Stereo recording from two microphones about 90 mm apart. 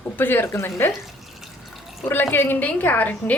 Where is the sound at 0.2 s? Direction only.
25° left (ahead or behind).